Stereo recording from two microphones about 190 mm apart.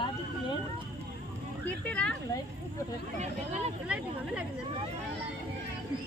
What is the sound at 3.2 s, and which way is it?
Speech, 35° right (ahead or behind).